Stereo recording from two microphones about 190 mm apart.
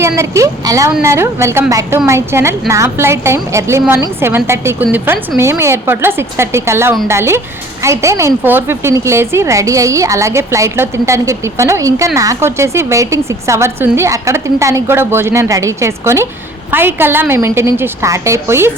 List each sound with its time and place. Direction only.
0.2 s speech: 15° right (ahead or behind)